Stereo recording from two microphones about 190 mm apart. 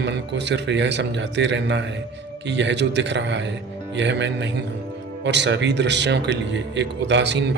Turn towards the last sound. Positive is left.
turn(degrees=-65)  # may be behind; listen again after turning